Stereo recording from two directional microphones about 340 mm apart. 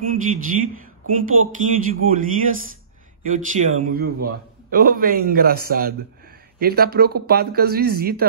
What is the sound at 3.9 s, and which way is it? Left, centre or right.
A man's voice, right.